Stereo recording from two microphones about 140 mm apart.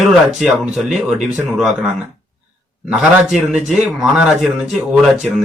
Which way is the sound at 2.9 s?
5° right (ahead or behind).